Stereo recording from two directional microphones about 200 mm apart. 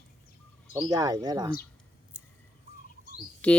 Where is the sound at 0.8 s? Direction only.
20° right (ahead or behind).